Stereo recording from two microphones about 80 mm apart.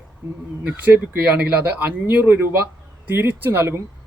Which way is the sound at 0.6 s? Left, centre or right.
Right.